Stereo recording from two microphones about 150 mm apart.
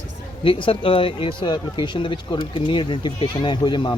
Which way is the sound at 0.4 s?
35° left (ahead or behind).